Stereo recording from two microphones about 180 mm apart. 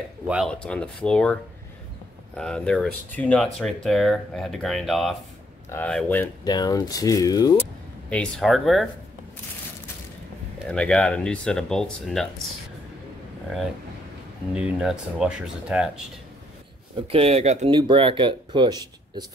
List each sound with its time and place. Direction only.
0.5 s speech: 5° left (ahead or behind)
6.4 s speech: 20° left (ahead or behind)
8.1 s speech: 5° left (ahead or behind)
10.7 s speech: 5° left (ahead or behind)
14.5 s speech: 5° right (ahead or behind)
16.9 s speech: 30° right (ahead or behind)